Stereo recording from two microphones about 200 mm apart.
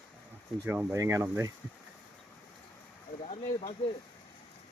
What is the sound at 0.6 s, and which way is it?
Speech, 10° right (ahead or behind).